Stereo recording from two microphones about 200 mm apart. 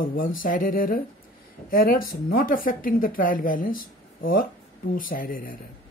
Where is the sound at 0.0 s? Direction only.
45° left (ahead or behind).